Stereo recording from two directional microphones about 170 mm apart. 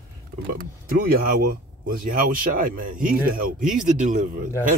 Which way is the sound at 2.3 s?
55° right (ahead or behind).